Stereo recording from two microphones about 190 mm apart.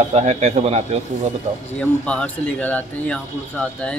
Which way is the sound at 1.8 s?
5° left (ahead or behind).